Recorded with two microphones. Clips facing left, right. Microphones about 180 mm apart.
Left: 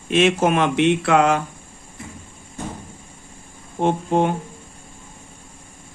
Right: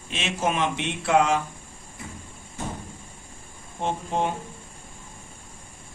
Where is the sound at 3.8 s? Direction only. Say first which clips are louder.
Left 8 dB; 60° left (ahead or behind).